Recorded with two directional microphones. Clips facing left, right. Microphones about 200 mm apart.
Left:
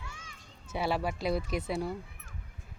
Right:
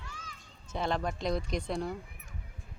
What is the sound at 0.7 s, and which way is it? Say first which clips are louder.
Speech: left 1 dB; 10° left (ahead or behind).